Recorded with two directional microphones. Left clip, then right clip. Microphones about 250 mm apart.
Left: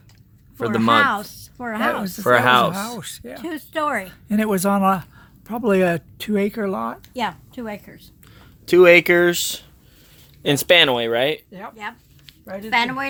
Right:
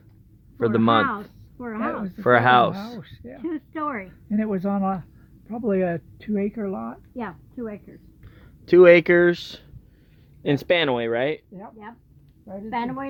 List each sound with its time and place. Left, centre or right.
0.6 s speech: centre
1.0 s speech: left
2.2 s speech: centre
3.0 s speech: left
8.4 s speech: centre
11.8 s a sound: centre
12.7 s a woman's voice: centre